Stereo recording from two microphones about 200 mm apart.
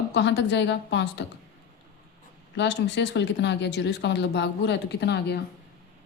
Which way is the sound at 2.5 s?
60° left (ahead or behind).